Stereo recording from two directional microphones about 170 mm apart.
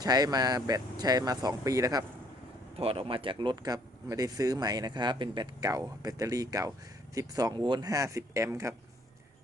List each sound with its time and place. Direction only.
0.0 s speech: 25° right (ahead or behind)
2.7 s speech: 35° right (ahead or behind); by 8.7 s 15° right (ahead or behind)